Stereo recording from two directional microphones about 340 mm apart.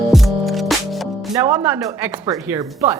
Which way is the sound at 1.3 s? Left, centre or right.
Centre.